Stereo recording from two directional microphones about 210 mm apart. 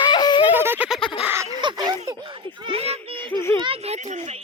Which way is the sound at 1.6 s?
20° right (ahead or behind).